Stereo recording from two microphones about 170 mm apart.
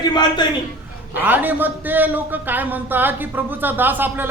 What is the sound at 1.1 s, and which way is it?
A man's voice, 10° right (ahead or behind).